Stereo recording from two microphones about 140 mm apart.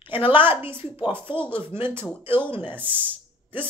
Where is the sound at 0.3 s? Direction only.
15° right (ahead or behind).